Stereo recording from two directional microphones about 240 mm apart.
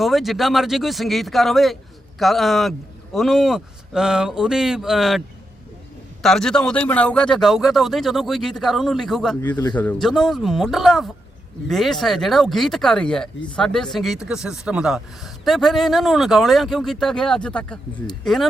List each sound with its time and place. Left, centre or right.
0.0 s speech: centre
6.2 s speech: centre
9.5 s speech: centre
17.9 s speech: centre
18.2 s speech: centre